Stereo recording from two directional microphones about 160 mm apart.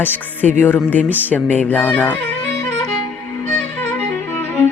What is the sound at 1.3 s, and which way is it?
Speech, 10° left (ahead or behind).